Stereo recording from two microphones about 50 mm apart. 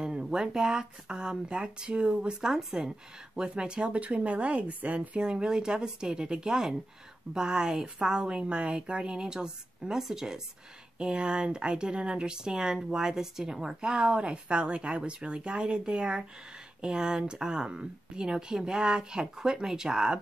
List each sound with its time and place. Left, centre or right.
0.0 s speech: centre
2.4 s speech: centre